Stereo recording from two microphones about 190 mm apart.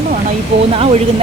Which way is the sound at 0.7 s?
30° right (ahead or behind).